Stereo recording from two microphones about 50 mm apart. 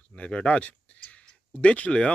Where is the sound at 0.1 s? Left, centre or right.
Left.